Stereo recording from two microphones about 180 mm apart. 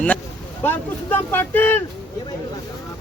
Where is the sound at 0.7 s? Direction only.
10° left (ahead or behind).